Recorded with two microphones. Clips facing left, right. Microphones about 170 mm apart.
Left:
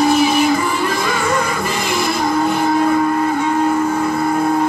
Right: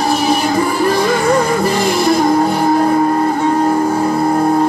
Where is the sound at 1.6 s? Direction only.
35° right (ahead or behind).